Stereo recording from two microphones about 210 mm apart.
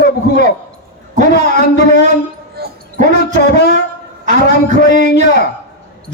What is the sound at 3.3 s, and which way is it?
Speech, 50° left (ahead or behind).